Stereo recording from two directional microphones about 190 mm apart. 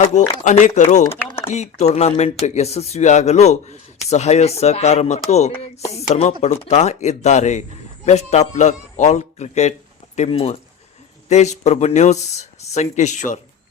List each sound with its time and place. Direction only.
0.0 s speech: 40° left (ahead or behind)